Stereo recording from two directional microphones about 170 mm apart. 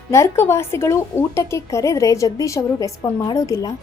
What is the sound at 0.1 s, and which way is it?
Speech, 15° left (ahead or behind).